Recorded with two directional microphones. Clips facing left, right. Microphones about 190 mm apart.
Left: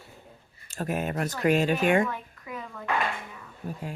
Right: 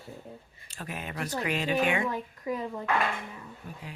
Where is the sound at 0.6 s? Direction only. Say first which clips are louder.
Left 9 dB; 45° left (ahead or behind).